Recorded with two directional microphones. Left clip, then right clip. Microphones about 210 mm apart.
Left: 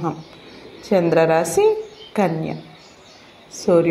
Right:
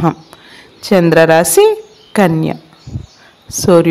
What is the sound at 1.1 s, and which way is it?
A woman's voice, 40° right (ahead or behind).